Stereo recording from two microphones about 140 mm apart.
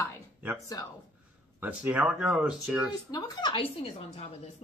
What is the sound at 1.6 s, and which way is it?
Speech, 10° right (ahead or behind).